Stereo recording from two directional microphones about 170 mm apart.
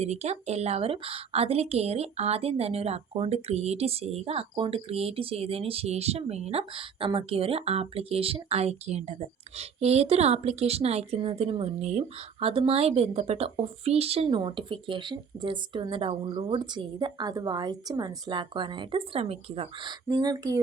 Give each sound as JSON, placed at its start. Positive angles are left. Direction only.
{"t": 0.0, "sound": "a woman's voice", "side_deg": -40}